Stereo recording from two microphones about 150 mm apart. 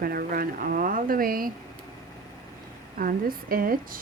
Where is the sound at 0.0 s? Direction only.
80° right.